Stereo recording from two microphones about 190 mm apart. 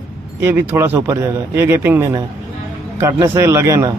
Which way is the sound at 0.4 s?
15° right (ahead or behind).